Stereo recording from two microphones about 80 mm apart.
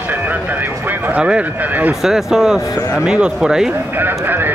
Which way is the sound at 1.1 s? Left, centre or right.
Centre.